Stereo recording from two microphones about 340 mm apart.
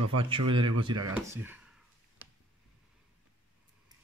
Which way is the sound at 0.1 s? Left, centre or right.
Centre.